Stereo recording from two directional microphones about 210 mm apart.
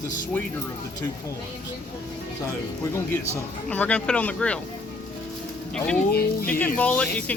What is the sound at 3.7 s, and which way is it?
Speech, 5° left (ahead or behind).